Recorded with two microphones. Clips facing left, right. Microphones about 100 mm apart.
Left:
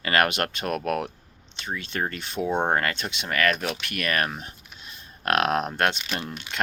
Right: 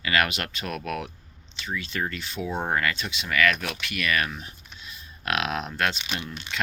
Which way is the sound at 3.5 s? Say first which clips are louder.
Left 3 dB; 30° left (ahead or behind).